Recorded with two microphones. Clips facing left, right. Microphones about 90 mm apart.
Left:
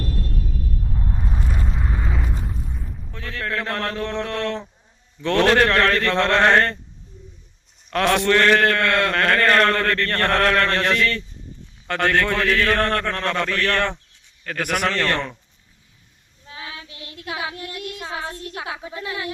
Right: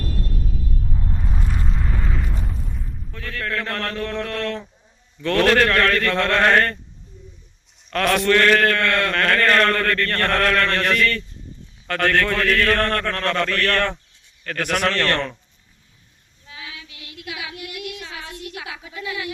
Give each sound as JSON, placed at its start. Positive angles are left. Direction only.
{"t": 0.9, "sound": "a sound", "side_deg": 5}
{"t": 3.1, "sound": "a man's voice", "side_deg": 25}
{"t": 7.9, "sound": "a man's voice", "side_deg": 25}
{"t": 16.5, "sound": "child singing", "side_deg": 35}